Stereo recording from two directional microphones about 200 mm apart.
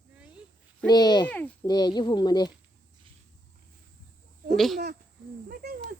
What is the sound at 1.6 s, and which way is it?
Speech, 20° left (ahead or behind).